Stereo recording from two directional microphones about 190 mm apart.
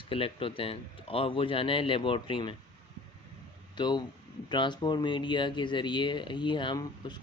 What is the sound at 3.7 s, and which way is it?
Speech, 25° left (ahead or behind).